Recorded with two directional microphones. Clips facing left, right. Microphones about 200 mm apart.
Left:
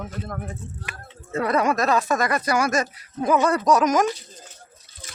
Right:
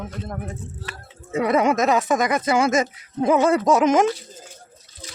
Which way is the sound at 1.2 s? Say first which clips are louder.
Right 3 dB; 20° right (ahead or behind).